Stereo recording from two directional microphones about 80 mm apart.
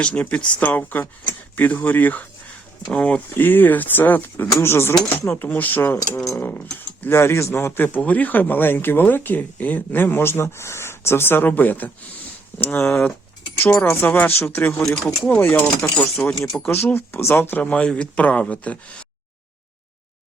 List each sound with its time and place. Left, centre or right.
0.0 s speech: centre
3.3 s speech: left
7.2 s speech: left
12.9 s speech: centre
14.8 s speech: centre
15.4 s speech: left